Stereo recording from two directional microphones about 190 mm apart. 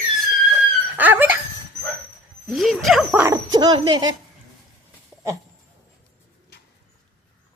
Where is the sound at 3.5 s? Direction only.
25° right (ahead or behind).